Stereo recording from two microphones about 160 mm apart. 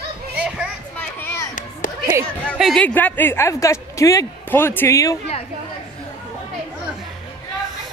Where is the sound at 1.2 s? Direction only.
15° left (ahead or behind).